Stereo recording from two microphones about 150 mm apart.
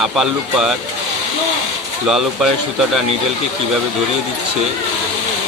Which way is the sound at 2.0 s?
5° right (ahead or behind).